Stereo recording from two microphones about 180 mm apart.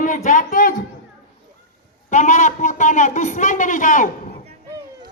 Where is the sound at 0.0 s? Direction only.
45° left (ahead or behind).